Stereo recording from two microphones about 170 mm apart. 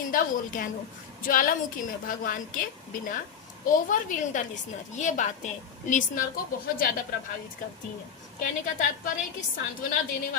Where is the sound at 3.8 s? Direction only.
50° left (ahead or behind).